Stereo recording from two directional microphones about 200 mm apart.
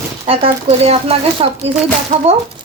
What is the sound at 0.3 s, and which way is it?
Speech, 30° right (ahead or behind).